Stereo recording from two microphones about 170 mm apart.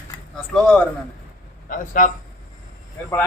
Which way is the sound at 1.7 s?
50° left (ahead or behind).